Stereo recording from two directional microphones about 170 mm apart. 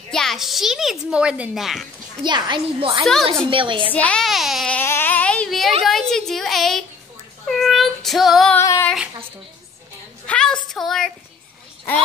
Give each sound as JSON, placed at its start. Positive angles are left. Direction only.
{"t": 0.1, "sound": "a child's voice", "side_deg": 0}
{"t": 2.2, "sound": "a woman's voice", "side_deg": -25}
{"t": 3.9, "sound": "speech", "side_deg": 5}
{"t": 7.4, "sound": "child singing", "side_deg": 0}
{"t": 8.5, "sound": "female singing", "side_deg": 15}
{"t": 10.2, "sound": "a sound", "side_deg": 5}